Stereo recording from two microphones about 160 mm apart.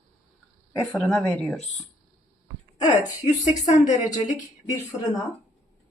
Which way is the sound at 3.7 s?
50° left (ahead or behind).